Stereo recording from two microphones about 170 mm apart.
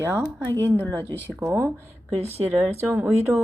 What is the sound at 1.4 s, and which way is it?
A woman's voice, 15° right (ahead or behind).